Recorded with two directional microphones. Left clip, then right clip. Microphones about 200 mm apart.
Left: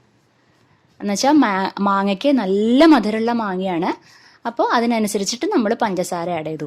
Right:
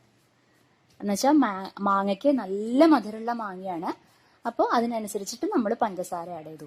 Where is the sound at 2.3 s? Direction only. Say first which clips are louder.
Left 9 dB; 30° left (ahead or behind).